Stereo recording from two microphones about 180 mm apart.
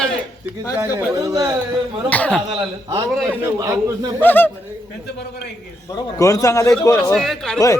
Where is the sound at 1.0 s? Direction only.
20° right (ahead or behind).